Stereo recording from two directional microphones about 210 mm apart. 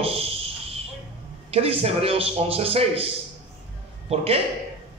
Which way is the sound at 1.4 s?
30° right (ahead or behind).